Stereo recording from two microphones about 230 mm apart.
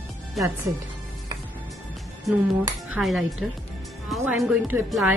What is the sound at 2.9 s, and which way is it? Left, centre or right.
A woman's voice, centre.